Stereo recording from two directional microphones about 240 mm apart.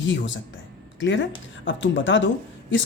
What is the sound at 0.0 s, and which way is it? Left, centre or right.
Speech, left.